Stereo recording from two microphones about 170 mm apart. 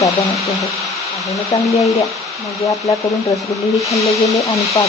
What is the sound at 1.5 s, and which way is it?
Speech, 20° left (ahead or behind).